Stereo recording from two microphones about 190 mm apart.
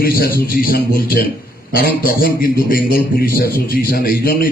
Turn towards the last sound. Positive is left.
turn(degrees=50)  # may be behind; listen again after turning